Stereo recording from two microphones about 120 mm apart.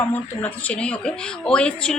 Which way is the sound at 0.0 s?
15° left (ahead or behind).